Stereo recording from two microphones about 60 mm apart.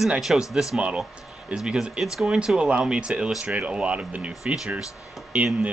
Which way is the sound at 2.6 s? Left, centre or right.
Centre.